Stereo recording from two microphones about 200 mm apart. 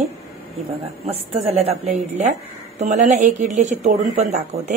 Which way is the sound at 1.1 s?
30° right (ahead or behind).